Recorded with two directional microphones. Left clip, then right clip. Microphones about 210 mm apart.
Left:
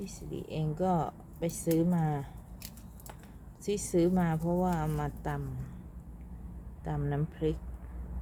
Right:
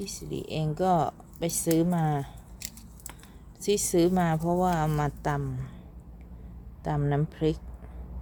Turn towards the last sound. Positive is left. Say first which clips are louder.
# right 5 dB
turn(degrees=-35)  # may be behind; listen again after turning